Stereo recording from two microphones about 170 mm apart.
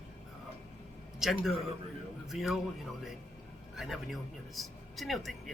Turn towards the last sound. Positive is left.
turn(degrees=0)  # may be behind; listen again after turning